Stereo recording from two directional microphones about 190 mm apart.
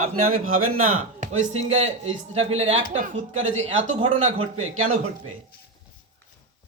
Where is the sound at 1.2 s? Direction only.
40° right (ahead or behind).